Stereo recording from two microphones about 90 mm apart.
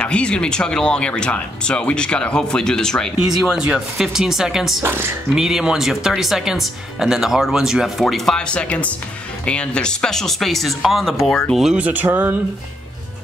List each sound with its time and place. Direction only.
0.0 s speech: 10° left (ahead or behind)
3.4 s speech: 10° right (ahead or behind)
4.8 s speech: 25° right (ahead or behind)
5.3 s speech: 5° right (ahead or behind)
11.8 s speech: 20° right (ahead or behind)